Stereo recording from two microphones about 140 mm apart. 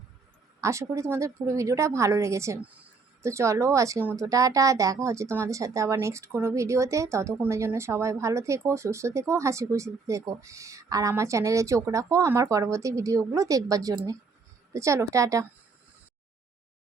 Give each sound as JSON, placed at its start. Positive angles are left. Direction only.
{"t": 0.6, "sound": "speech", "side_deg": -20}